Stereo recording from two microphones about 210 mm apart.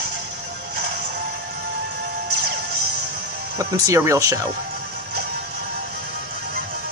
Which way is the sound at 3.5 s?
15° right (ahead or behind).